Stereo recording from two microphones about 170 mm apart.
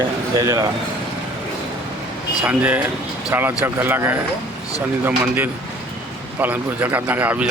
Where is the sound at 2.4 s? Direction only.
5° right (ahead or behind).